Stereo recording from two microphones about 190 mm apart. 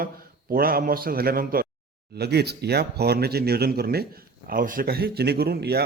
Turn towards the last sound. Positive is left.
turn(degrees=-55)  # may be behind; listen again after turning